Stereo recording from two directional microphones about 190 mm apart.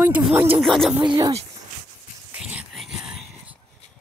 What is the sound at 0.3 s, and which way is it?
Speech, 10° right (ahead or behind).